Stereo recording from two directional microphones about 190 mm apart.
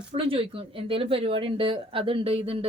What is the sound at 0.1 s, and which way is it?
A woman's voice, 30° right (ahead or behind).